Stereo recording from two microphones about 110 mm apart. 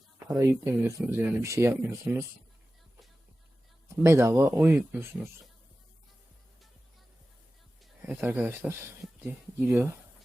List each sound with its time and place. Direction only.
0.3 s speech: 25° right (ahead or behind)
4.0 s speech: 25° right (ahead or behind)
8.2 s speech: 20° right (ahead or behind)